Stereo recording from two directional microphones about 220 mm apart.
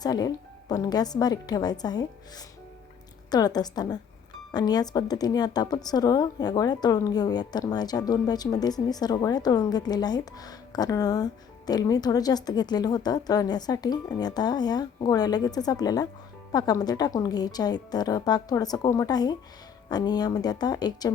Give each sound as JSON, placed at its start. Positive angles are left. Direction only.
{"t": 0.0, "sound": "a woman's voice", "side_deg": 15}
{"t": 3.2, "sound": "a woman's voice", "side_deg": 20}